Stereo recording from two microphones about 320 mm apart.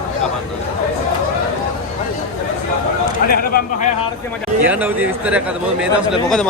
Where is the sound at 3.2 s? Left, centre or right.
Left.